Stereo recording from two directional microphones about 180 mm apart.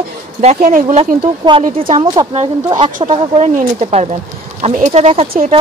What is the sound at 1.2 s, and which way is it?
A woman's voice, 30° right (ahead or behind).